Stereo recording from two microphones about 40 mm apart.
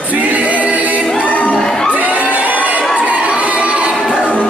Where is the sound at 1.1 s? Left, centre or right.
Left.